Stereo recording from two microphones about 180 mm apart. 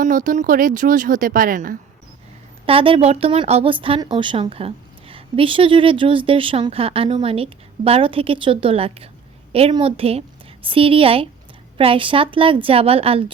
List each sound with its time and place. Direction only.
0.0 s speech: 45° right (ahead or behind)
2.6 s a woman's voice: 30° right (ahead or behind)